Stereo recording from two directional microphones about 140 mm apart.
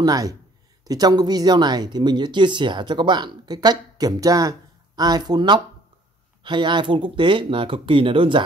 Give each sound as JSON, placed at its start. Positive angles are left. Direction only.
{"t": 0.0, "sound": "speech", "side_deg": -25}